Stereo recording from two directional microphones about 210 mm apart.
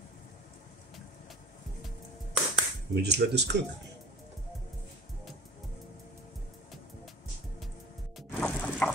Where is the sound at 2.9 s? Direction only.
50° right (ahead or behind).